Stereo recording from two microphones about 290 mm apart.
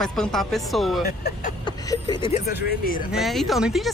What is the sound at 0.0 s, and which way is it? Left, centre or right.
Speech, centre.